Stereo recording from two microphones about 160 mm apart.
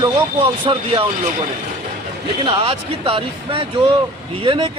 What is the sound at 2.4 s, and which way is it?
Speech, 35° right (ahead or behind).